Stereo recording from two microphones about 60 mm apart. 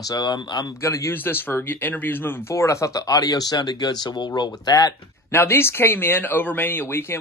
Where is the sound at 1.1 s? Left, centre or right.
Left.